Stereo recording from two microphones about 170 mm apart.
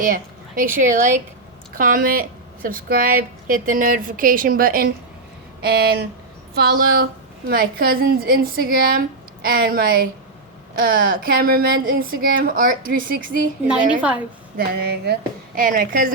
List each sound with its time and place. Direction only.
0.0 s a woman's voice: 55° right (ahead or behind)
13.9 s a woman's voice: 5° right (ahead or behind)
14.7 s a woman's voice: 70° right (ahead or behind)